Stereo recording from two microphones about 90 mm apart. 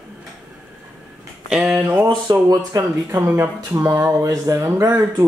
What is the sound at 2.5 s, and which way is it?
Speech, 40° right (ahead or behind).